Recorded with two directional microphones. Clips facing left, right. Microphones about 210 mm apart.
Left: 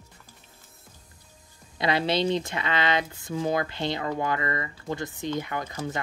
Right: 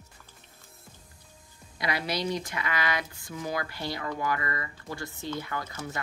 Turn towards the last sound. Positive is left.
turn(degrees=25)  # may be behind; listen again after turning